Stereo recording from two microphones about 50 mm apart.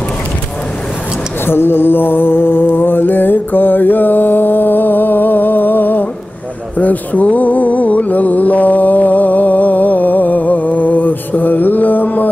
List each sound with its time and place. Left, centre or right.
1.4 s music: left